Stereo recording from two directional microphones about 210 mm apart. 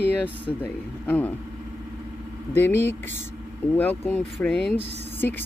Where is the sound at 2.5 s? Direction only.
10° left (ahead or behind).